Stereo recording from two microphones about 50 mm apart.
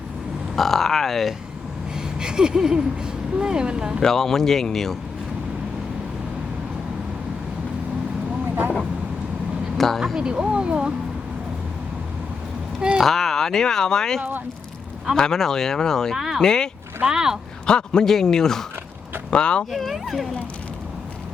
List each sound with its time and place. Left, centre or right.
0.5 s speech: centre
2.1 s speech: centre
4.0 s speech: centre
9.7 s vehicle: centre
10.2 s speech: centre
13.0 s speech: centre
14.2 s speech: right
15.1 s speech: centre
16.1 s speech: centre
16.4 s speech: centre
17.1 s speech: centre
17.7 s speech: centre
19.7 s speech: centre